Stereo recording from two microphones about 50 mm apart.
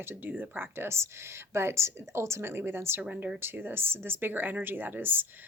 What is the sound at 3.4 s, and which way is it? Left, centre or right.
Speech, right.